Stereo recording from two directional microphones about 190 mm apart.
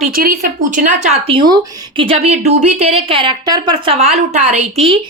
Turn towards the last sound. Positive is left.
turn(degrees=-35)  # may be behind; listen again after turning